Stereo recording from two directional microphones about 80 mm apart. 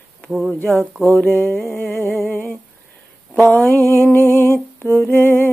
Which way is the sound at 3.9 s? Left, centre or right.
Left.